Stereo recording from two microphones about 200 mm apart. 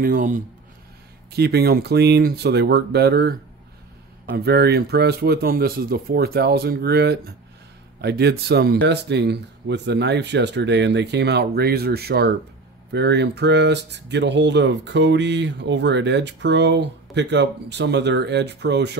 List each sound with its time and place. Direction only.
0.0 s speech: 45° right (ahead or behind)
4.5 s speech: 55° right (ahead or behind)